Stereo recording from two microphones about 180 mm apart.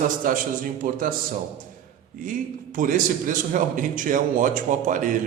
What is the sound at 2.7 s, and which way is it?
A man's voice, 50° right (ahead or behind).